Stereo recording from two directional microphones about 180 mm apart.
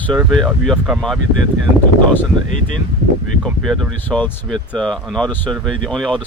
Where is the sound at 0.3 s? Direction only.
Centre (ahead or behind).